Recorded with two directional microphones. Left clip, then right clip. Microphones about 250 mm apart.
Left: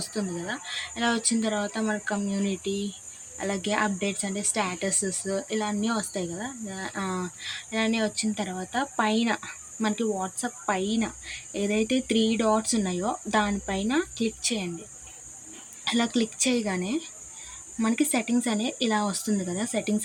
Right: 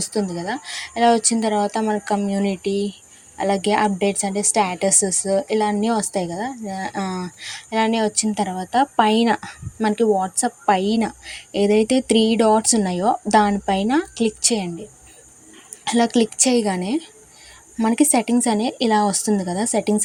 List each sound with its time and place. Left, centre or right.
0.0 s a woman's voice: right
15.8 s a woman's voice: right